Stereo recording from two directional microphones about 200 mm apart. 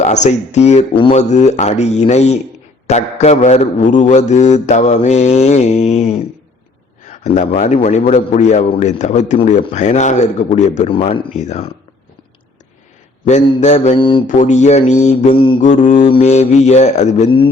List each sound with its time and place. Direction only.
0.0 s a man's voice: 35° left (ahead or behind)
13.2 s a man's voice: 35° left (ahead or behind)
14.3 s a man's voice: 35° left (ahead or behind)